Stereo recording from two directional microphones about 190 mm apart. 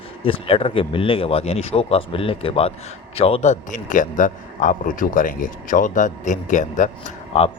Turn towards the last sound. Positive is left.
turn(degrees=35)  # may be behind; listen again after turning